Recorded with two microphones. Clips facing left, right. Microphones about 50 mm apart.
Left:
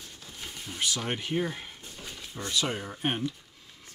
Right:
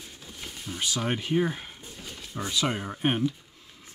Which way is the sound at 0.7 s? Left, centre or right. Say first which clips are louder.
Right 2 dB; centre.